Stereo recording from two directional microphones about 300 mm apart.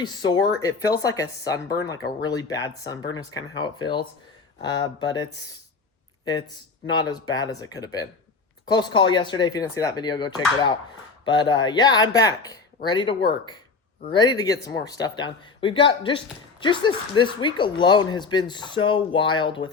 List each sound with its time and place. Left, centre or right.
0.0 s speech: centre
6.8 s speech: centre